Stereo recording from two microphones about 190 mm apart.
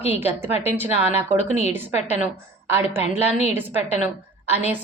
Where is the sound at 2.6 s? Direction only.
10° right (ahead or behind).